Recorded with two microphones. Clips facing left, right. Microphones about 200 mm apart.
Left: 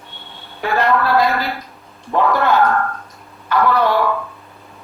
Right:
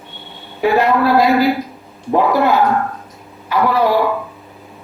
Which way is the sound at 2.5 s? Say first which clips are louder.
Right 1 dB; 20° right (ahead or behind).